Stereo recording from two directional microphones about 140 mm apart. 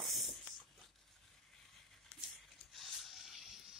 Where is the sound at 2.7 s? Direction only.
Centre (ahead or behind).